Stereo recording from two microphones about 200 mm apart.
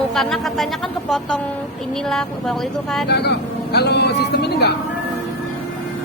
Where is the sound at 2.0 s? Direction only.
Centre (ahead or behind).